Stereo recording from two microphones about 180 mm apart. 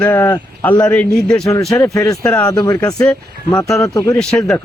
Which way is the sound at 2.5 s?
20° left (ahead or behind).